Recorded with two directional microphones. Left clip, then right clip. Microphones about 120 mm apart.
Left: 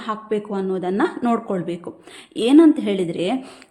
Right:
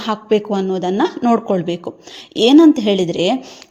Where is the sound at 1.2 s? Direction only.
35° right (ahead or behind).